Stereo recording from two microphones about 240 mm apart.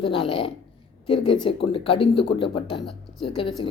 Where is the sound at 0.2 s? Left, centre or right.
Left.